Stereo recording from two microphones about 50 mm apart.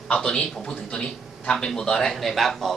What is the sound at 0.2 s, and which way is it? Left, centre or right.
A man's voice, centre.